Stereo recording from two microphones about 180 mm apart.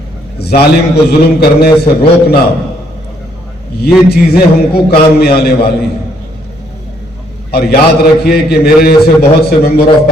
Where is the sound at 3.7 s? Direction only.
60° left (ahead or behind).